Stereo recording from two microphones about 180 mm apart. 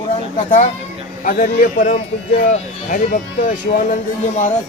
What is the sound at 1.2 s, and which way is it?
Speech, 50° left (ahead or behind).